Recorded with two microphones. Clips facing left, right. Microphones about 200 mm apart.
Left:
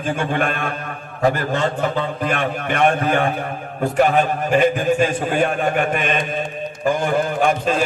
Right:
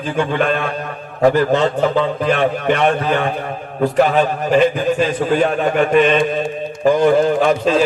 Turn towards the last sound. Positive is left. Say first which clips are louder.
# right 4 dB
turn(degrees=50)  # may be behind; listen again after turning